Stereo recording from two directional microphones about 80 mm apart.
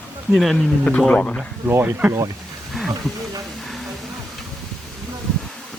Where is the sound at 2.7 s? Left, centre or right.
Centre.